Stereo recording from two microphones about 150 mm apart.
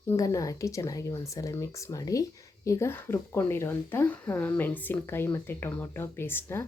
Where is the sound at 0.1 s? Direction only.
20° left (ahead or behind).